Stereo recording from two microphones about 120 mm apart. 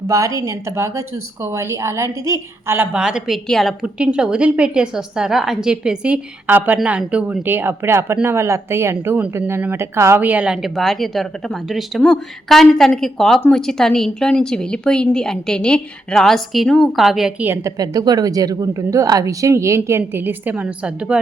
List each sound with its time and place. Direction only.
0.1 s a woman's voice: 25° right (ahead or behind); by 17.3 s 5° right (ahead or behind)
17.4 s a woman's voice: 20° right (ahead or behind)
17.7 s a woman's voice: 30° right (ahead or behind); by 21.2 s 10° right (ahead or behind)